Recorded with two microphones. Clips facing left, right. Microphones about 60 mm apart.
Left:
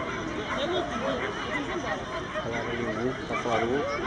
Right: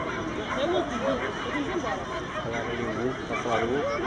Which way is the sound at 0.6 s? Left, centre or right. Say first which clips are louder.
Right 4 dB; centre.